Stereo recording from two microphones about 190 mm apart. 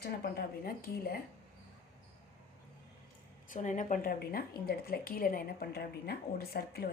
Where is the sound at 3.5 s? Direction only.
40° left (ahead or behind).